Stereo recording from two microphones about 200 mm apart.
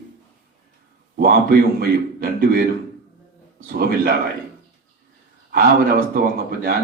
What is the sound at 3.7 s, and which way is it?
Speech, 50° right (ahead or behind).